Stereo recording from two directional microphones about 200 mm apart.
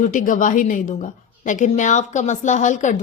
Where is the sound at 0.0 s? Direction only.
40° left (ahead or behind).